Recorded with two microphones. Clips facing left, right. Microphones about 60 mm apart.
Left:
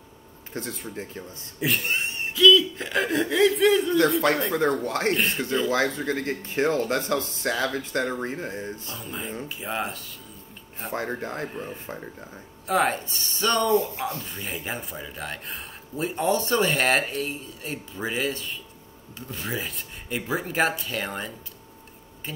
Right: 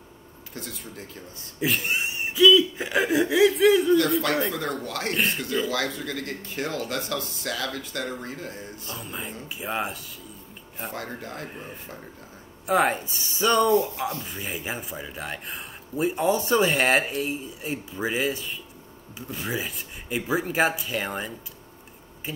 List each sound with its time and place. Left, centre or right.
0.5 s speech: left
1.6 s a sound: centre
4.5 s speech: left
5.1 s speech: centre
5.7 s speech: left
8.9 s speech: centre
10.9 s speech: left
11.4 s speech: centre